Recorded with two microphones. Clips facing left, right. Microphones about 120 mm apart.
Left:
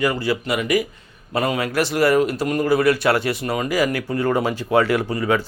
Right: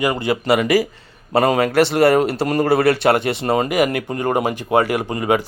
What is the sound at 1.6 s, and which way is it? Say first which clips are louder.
Speech: right 5 dB; 65° right (ahead or behind).